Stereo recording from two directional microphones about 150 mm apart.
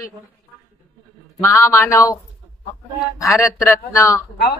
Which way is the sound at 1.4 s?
20° left (ahead or behind).